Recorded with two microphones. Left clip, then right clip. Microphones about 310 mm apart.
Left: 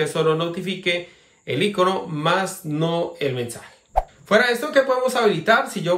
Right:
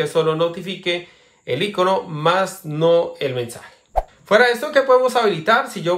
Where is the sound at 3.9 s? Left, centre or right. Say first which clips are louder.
Even; centre.